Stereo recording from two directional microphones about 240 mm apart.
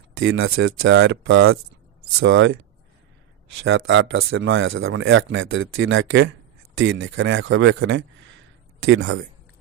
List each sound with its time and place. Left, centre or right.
0.2 s speech: right
3.6 s speech: right